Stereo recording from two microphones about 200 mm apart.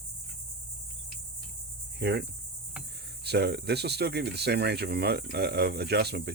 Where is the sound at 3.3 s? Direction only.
55° right (ahead or behind).